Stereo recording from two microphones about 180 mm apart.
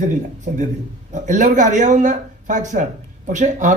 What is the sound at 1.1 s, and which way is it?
A man's voice, 45° right (ahead or behind).